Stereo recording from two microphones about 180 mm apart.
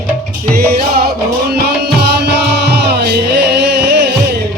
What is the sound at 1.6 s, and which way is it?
Music, 65° right (ahead or behind).